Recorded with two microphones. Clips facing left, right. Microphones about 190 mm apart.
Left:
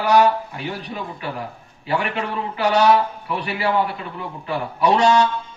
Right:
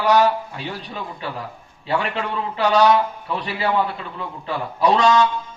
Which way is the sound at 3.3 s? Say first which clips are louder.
Left 1 dB; 25° right (ahead or behind).